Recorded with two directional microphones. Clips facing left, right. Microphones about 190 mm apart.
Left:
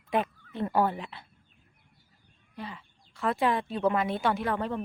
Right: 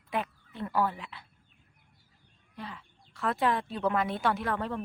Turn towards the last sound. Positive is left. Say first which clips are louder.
# left 2 dB
turn(degrees=0)  # may be behind; listen again after turning